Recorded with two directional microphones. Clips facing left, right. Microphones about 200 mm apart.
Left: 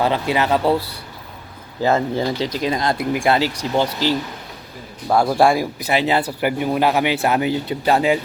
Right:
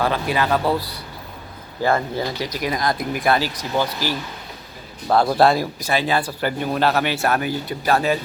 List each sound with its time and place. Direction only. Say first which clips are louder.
0.0 s speech: left 2 dB; 20° left (ahead or behind)
5.0 s speech: left 1 dB; 5° left (ahead or behind)